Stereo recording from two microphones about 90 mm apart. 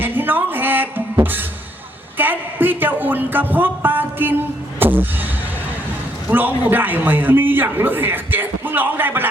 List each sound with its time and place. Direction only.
0.0 s music: 20° right (ahead or behind)
2.1 s a man's voice: 20° right (ahead or behind)
3.5 s music: 20° right (ahead or behind)
6.3 s a man's voice: 20° right (ahead or behind)